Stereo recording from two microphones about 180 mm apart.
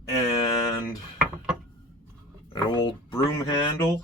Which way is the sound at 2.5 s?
25° left (ahead or behind).